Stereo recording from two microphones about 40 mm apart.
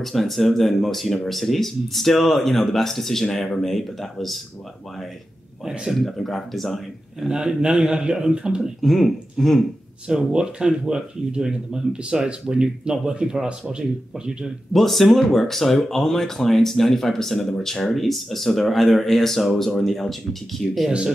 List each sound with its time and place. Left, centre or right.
0.0 s speech: centre
6.1 s speech: centre
7.2 s speech: centre
8.8 s speech: centre
10.0 s speech: centre
14.7 s speech: centre
17.9 s speech: centre